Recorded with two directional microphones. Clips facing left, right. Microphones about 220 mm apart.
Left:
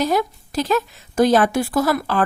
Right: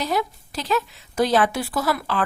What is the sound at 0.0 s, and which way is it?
A woman's voice, 45° left (ahead or behind).